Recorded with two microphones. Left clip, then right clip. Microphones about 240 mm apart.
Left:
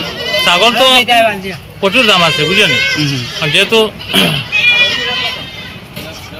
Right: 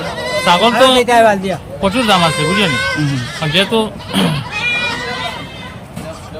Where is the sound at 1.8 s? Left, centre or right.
Centre.